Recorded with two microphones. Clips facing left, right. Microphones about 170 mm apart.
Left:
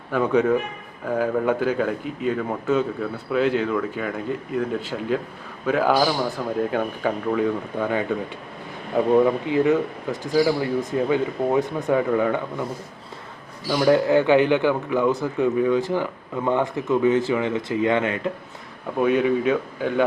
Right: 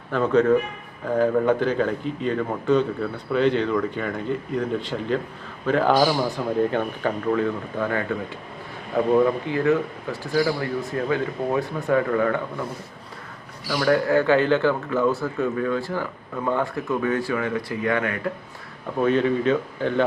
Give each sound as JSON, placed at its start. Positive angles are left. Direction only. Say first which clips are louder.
{"t": 0.1, "sound": "speech", "louder": "right 1 dB", "side_deg": 10}
{"t": 9.5, "sound": "speech", "louder": "left 2 dB", "side_deg": 20}
{"t": 13.7, "sound": "speech", "louder": "left 3 dB", "side_deg": 20}
{"t": 19.0, "sound": "speech", "louder": "left 1 dB", "side_deg": 10}